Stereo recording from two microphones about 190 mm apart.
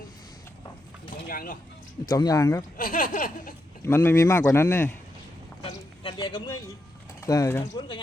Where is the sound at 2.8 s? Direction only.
45° left (ahead or behind).